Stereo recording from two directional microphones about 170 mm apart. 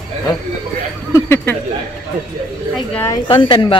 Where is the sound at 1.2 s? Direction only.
15° left (ahead or behind).